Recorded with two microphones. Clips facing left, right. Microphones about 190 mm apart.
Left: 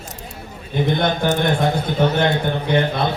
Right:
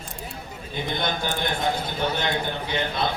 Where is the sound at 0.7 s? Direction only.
55° left (ahead or behind).